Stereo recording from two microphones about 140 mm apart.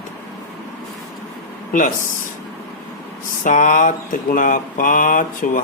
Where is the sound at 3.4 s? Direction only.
65° left (ahead or behind).